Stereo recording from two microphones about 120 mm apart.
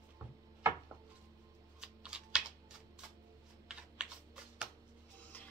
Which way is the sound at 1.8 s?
5° right (ahead or behind).